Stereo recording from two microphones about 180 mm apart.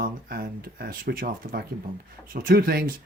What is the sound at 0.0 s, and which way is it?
Speech, 55° right (ahead or behind).